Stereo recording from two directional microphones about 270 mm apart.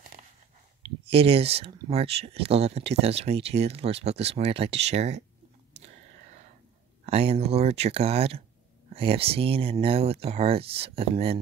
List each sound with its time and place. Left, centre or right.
0.8 s speech: right
7.1 s speech: right